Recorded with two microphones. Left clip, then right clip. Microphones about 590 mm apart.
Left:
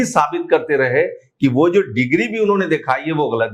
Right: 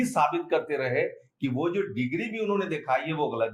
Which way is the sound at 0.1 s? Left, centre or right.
Left.